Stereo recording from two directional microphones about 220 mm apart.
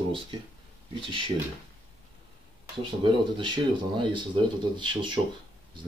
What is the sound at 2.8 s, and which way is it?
Speech, 20° right (ahead or behind).